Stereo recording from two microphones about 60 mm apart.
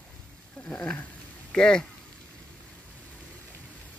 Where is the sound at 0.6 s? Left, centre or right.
Left.